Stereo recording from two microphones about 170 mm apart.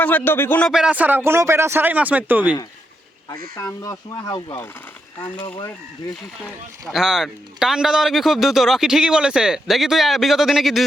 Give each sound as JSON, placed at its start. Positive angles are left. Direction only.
{"t": 0.0, "sound": "speech", "side_deg": 10}
{"t": 0.7, "sound": "speech", "side_deg": -5}
{"t": 3.5, "sound": "speech", "side_deg": 20}
{"t": 6.4, "sound": "a man's voice", "side_deg": 0}